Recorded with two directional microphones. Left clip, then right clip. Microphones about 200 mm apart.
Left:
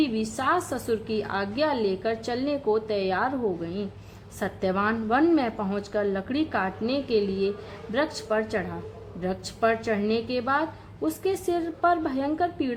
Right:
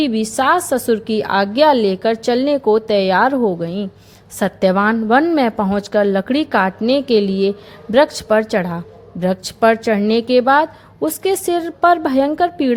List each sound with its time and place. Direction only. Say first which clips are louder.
0.0 s a woman's voice: right 10 dB; 40° right (ahead or behind)